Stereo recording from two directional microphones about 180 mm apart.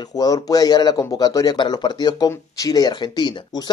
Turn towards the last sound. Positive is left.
turn(degrees=25)  # may be behind; listen again after turning